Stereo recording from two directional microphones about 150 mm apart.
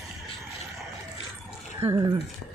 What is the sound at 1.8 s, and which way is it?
Speech, 20° right (ahead or behind).